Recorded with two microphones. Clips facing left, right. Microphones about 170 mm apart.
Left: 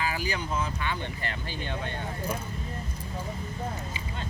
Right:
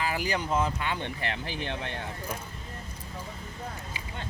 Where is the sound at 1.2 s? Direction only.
75° right (ahead or behind).